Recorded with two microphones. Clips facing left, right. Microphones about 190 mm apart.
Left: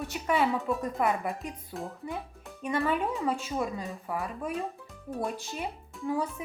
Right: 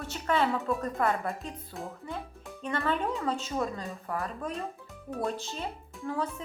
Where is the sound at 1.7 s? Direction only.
Centre (ahead or behind).